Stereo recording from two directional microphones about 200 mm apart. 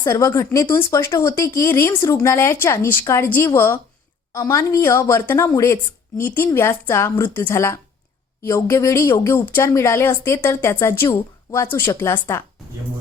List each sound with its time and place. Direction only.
0.0 s speech: 15° left (ahead or behind)